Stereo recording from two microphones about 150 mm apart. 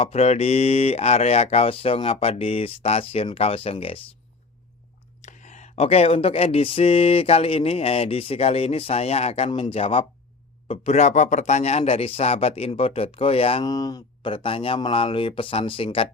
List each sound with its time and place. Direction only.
0.0 s speech: 40° left (ahead or behind)
5.2 s a man's voice: 50° left (ahead or behind)
13.7 s speech: 25° left (ahead or behind)